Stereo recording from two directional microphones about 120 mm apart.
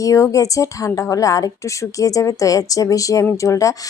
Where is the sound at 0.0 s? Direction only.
25° left (ahead or behind).